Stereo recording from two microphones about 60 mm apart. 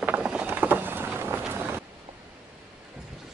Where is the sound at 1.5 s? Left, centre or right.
Right.